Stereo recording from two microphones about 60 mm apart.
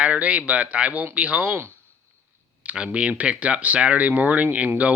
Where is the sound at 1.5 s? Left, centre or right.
Right.